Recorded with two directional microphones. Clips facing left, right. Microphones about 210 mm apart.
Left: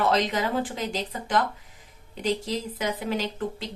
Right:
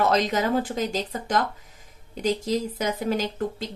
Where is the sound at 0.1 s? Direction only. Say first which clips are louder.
Right 2 dB; 45° right (ahead or behind).